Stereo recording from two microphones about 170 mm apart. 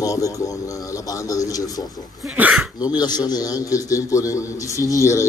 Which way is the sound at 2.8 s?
25° left (ahead or behind).